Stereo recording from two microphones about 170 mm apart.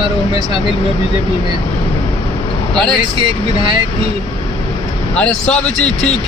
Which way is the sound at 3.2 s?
30° right (ahead or behind).